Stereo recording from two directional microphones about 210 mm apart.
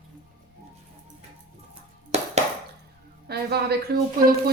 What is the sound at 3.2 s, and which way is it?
Speech, 50° right (ahead or behind).